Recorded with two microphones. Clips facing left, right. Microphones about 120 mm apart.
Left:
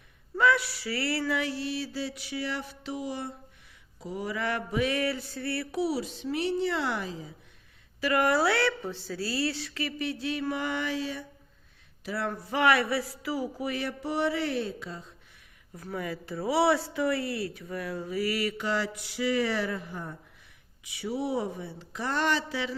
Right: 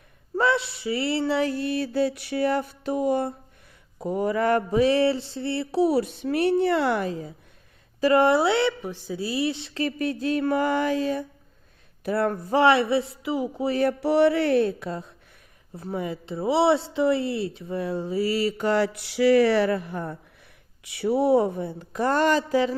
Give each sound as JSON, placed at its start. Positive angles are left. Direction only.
{"t": 0.3, "sound": "speech", "side_deg": -30}
{"t": 1.5, "sound": "mantra", "side_deg": -50}
{"t": 5.8, "sound": "a sound", "side_deg": -55}
{"t": 8.0, "sound": "a man's voice", "side_deg": -25}
{"t": 9.7, "sound": "mantra", "side_deg": -40}
{"t": 12.5, "sound": "a man's voice", "side_deg": -25}
{"t": 13.7, "sound": "mantra", "side_deg": -45}
{"t": 14.0, "sound": "a sound", "side_deg": -65}
{"t": 15.7, "sound": "a man's voice", "side_deg": -25}
{"t": 18.5, "sound": "a sound", "side_deg": -50}
{"t": 20.8, "sound": "mantra", "side_deg": -60}